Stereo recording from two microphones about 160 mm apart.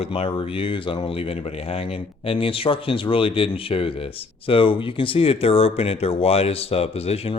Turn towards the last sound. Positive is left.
turn(degrees=40)  # may be behind; listen again after turning